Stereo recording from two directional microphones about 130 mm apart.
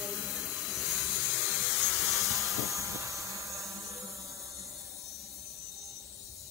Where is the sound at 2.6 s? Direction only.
25° right (ahead or behind).